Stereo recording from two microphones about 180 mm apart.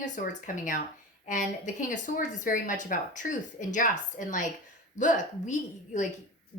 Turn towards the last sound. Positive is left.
turn(degrees=45)  # may be behind; listen again after turning